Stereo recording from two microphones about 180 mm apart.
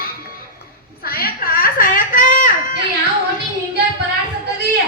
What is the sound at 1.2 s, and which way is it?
Whimper, 55° left (ahead or behind).